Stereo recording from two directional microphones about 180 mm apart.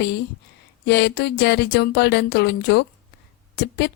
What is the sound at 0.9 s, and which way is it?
A woman's voice, 70° left (ahead or behind).